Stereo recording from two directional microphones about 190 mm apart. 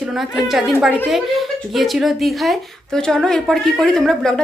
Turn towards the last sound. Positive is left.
turn(degrees=5)  # may be behind; listen again after turning